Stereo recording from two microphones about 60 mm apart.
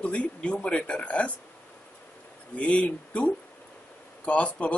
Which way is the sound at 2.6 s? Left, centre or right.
Left.